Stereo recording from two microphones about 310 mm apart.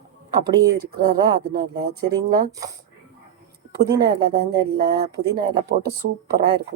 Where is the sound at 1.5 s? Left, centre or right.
Right.